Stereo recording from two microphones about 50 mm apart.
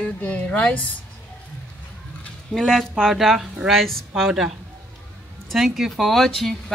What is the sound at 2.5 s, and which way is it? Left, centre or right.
Speech, centre.